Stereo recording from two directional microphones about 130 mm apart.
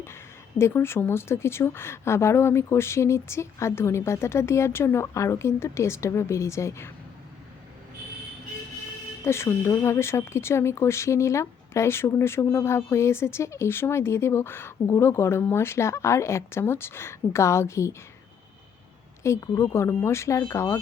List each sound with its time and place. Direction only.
0.6 s speech: 20° left (ahead or behind)
9.2 s speech: 20° left (ahead or behind)
19.2 s speech: 20° left (ahead or behind)